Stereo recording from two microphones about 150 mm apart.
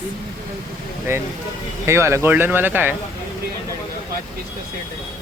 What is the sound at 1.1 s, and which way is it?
Speech, 20° right (ahead or behind).